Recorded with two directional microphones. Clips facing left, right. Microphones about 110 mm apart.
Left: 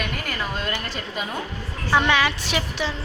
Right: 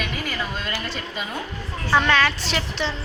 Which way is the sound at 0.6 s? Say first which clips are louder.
Left 1 dB; 50° left (ahead or behind).